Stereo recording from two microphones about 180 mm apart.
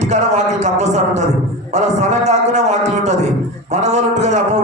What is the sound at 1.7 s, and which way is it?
Music, 40° right (ahead or behind).